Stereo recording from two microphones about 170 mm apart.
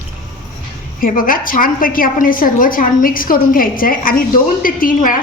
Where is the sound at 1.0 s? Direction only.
55° left (ahead or behind).